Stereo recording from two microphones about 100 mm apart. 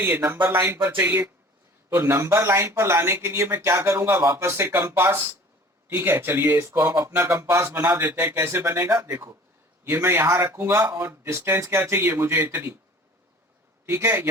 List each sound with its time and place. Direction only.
0.4 s speech: 25° right (ahead or behind)
13.8 s speech: 25° right (ahead or behind)